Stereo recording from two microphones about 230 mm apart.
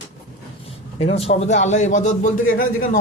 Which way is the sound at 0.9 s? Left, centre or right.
Left.